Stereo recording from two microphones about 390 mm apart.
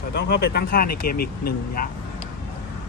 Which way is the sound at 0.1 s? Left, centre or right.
Left.